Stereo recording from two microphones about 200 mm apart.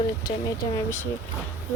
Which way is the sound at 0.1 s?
20° left (ahead or behind).